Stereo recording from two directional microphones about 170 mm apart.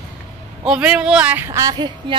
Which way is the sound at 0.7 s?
5° right (ahead or behind).